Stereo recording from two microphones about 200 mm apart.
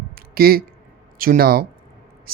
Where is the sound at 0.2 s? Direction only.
50° right (ahead or behind).